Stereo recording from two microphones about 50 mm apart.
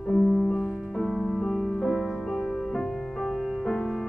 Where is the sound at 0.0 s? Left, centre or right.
Centre.